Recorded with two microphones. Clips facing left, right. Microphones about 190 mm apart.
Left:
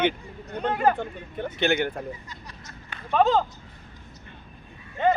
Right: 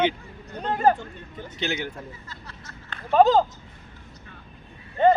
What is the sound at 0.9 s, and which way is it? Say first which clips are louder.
Speech: left 5 dB; 60° left (ahead or behind).